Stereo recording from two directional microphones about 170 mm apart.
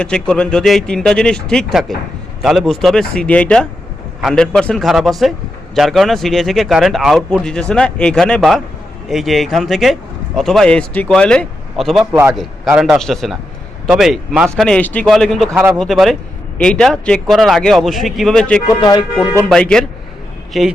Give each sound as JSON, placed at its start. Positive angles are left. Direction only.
{"t": 0.0, "sound": "speech", "side_deg": 5}
{"t": 15.5, "sound": "speech", "side_deg": -10}
{"t": 15.8, "sound": "speech", "side_deg": 0}
{"t": 18.7, "sound": "speech", "side_deg": 25}
{"t": 19.5, "sound": "speech", "side_deg": 5}